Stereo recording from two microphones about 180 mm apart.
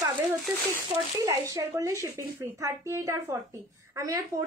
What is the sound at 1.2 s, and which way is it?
A woman's voice, 15° right (ahead or behind).